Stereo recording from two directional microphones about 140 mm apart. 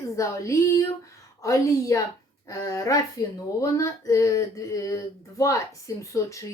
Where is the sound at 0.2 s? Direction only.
20° left (ahead or behind).